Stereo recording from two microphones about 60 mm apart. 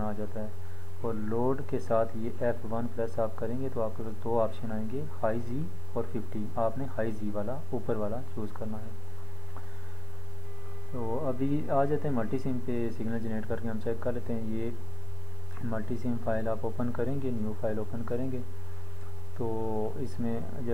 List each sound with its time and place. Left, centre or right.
0.0 s a sound: centre
1.0 s speech: centre
11.0 s speech: centre
15.7 s speech: centre
19.3 s speech: centre